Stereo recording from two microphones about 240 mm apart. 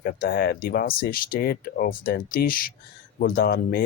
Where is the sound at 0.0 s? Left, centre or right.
Left.